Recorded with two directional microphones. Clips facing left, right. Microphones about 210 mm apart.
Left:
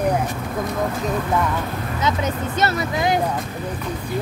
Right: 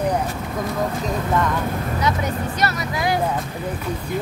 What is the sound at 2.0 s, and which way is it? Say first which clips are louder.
Speech: left 2 dB; 20° left (ahead or behind).